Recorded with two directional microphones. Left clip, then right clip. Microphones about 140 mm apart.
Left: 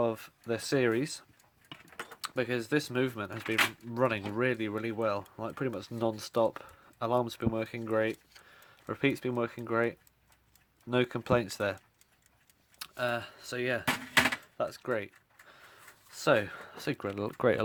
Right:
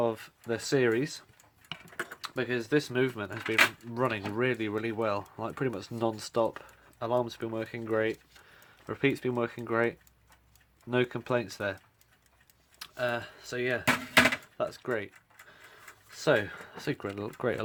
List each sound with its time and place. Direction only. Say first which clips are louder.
0.0 s speech: right 1 dB; 35° left (ahead or behind)
2.2 s speech: left 1 dB; 45° left (ahead or behind); by 10.0 s 25° left (ahead or behind)
10.8 s speech: even; 40° left (ahead or behind)
12.8 s speech: right 1 dB; 50° left (ahead or behind)